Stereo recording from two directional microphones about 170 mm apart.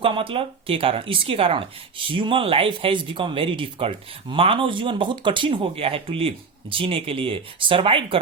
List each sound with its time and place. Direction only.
0.0 s speech: 30° right (ahead or behind)